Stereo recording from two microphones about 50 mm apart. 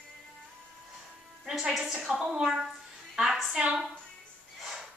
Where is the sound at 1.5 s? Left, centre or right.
Centre.